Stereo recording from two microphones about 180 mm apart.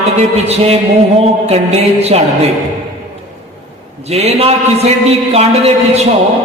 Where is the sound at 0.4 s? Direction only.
35° right (ahead or behind).